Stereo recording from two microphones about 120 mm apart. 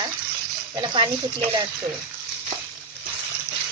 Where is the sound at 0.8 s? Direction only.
45° right (ahead or behind).